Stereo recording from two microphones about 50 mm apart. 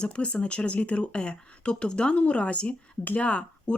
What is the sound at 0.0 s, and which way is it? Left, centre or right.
Speech, left.